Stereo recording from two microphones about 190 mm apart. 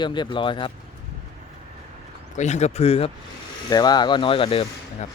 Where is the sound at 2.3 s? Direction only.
40° left (ahead or behind).